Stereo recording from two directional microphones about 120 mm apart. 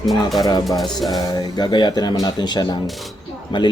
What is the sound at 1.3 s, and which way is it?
Speech, 35° left (ahead or behind).